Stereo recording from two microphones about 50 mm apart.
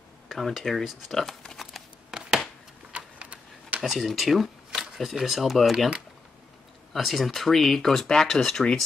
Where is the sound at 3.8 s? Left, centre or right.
Centre.